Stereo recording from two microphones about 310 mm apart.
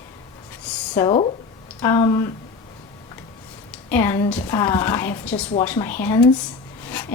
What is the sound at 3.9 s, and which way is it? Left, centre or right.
A woman's voice, centre.